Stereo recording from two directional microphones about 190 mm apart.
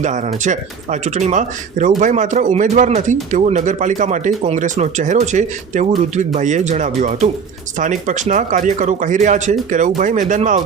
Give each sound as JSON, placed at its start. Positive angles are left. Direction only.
{"t": 0.0, "sound": "speech", "side_deg": -40}